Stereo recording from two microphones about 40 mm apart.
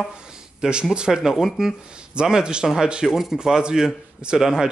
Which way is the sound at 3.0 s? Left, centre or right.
Centre.